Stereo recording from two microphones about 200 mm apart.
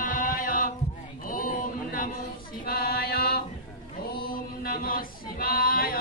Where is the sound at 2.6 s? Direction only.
50° left (ahead or behind).